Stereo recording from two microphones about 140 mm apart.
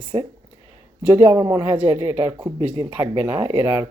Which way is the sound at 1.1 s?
25° right (ahead or behind).